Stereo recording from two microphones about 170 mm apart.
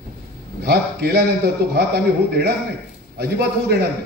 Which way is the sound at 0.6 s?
65° right (ahead or behind).